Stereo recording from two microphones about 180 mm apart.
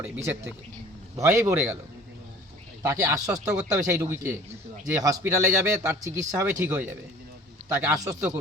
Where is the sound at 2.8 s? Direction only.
15° right (ahead or behind).